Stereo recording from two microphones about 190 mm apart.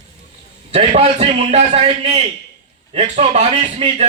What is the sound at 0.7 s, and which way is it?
A man's voice, 30° right (ahead or behind).